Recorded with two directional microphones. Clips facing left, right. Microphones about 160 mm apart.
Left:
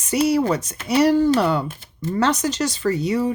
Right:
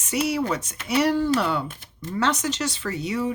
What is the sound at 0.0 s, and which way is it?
Speech, 35° left (ahead or behind).